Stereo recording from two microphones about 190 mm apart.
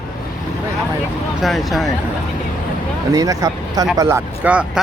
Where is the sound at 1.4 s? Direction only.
Centre (ahead or behind).